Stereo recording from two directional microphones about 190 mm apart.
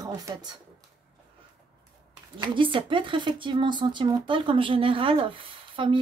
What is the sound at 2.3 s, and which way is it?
Speech, 25° right (ahead or behind).